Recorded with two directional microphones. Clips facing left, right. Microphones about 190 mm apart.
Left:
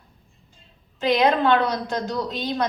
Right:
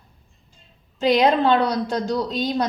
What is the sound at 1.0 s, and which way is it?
A woman's voice, 30° right (ahead or behind).